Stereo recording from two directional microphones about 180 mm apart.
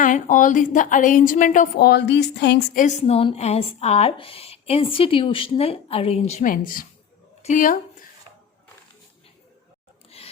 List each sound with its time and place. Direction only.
0.0 s a woman's voice: 45° left (ahead or behind); by 2.6 s 70° left (ahead or behind)
2.7 s speech: 40° left (ahead or behind)
6.4 s a woman's voice: 50° left (ahead or behind)
7.4 s a sound: 45° left (ahead or behind)